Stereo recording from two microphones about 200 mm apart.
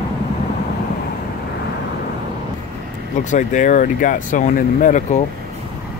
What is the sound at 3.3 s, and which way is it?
Speech, 40° left (ahead or behind).